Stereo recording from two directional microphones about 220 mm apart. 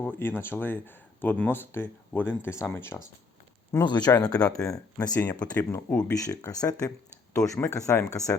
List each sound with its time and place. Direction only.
0.0 s speech: 10° left (ahead or behind)
4.2 s speech: 5° left (ahead or behind)
4.7 s speech: 15° left (ahead or behind)